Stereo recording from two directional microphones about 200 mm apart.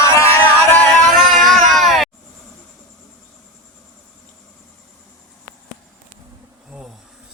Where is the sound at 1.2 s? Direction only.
Centre (ahead or behind).